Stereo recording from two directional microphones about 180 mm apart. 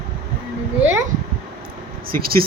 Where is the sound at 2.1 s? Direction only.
55° right (ahead or behind).